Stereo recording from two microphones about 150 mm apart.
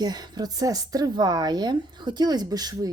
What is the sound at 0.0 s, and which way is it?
Speech, 30° right (ahead or behind).